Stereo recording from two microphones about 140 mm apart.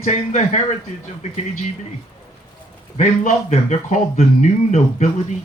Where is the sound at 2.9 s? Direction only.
60° left (ahead or behind).